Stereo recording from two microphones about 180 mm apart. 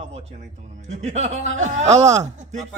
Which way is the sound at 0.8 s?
40° right (ahead or behind).